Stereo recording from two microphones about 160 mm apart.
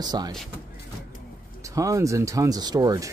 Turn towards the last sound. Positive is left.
turn(degrees=-25)  # may be behind; listen again after turning